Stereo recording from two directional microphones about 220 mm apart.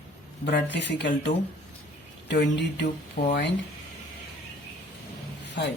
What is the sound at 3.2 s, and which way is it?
Speech, 35° left (ahead or behind).